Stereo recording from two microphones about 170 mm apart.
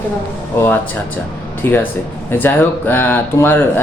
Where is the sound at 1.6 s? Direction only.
10° left (ahead or behind).